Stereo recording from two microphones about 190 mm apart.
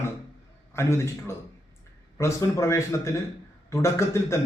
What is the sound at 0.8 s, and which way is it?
A man's voice, 15° left (ahead or behind).